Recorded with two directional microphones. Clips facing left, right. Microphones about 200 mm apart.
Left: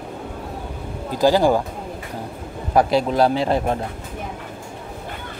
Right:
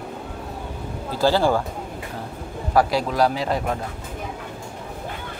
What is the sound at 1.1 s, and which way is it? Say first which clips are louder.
Speech: left 3 dB; 15° left (ahead or behind).